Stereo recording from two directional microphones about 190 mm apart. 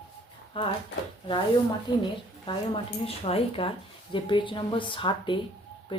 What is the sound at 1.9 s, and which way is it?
A woman's voice, 25° left (ahead or behind).